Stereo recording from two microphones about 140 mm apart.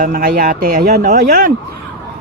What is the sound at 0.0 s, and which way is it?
Speech, 80° right.